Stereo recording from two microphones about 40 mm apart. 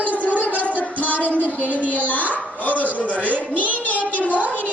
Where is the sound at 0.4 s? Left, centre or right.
Left.